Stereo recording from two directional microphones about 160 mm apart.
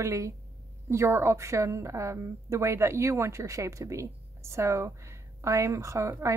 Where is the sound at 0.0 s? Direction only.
20° right (ahead or behind).